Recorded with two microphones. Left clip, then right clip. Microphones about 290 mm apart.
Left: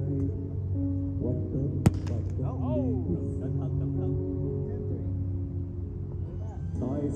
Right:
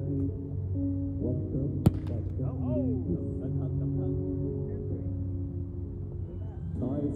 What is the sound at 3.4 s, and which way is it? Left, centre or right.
Music, left.